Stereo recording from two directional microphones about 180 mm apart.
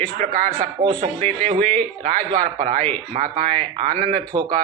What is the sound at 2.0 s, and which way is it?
Speech, 45° right (ahead or behind).